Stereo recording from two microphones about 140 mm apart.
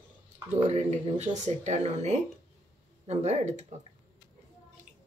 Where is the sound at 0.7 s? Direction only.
55° right (ahead or behind).